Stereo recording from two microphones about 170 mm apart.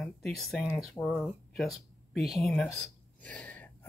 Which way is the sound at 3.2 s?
5° left (ahead or behind).